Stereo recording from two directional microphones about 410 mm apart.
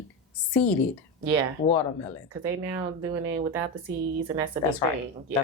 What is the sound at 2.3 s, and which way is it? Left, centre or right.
Speech, centre.